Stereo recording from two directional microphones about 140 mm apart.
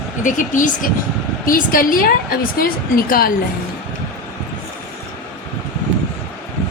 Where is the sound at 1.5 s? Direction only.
90° left.